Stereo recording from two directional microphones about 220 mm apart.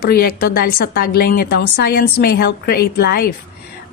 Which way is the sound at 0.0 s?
45° left (ahead or behind).